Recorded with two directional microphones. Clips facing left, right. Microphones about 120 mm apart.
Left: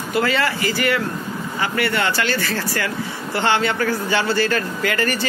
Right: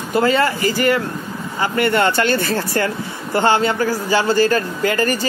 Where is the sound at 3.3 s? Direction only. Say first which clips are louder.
Right 4 dB; 40° right (ahead or behind).